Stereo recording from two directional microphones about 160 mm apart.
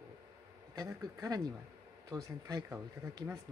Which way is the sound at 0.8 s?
20° right (ahead or behind).